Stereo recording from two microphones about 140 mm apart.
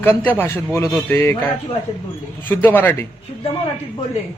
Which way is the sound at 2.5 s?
15° left (ahead or behind).